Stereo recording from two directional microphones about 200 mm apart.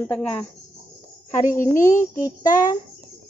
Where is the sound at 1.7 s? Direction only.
40° left (ahead or behind).